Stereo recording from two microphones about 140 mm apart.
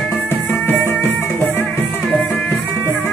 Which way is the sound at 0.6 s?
15° left (ahead or behind).